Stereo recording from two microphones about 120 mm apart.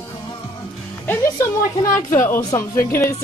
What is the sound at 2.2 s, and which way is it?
Speech, 20° left (ahead or behind).